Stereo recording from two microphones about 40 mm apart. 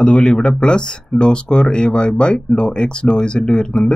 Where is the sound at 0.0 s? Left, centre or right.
Centre.